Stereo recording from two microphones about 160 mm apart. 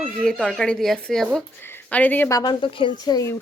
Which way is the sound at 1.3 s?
15° left (ahead or behind).